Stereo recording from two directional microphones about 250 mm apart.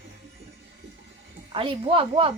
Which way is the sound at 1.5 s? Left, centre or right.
Right.